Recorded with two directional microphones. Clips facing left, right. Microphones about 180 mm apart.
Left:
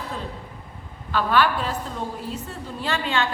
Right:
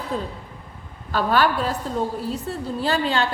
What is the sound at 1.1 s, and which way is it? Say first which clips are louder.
A woman's voice: right 1 dB; 40° right (ahead or behind).